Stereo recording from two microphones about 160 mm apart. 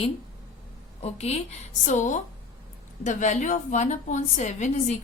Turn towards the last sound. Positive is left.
turn(degrees=45)  # may be behind; listen again after turning